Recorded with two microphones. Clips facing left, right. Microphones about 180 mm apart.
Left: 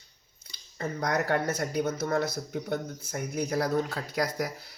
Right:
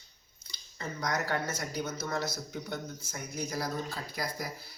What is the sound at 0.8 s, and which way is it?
Speech, 55° left (ahead or behind).